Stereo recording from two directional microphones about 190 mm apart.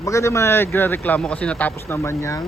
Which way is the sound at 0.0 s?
15° left (ahead or behind).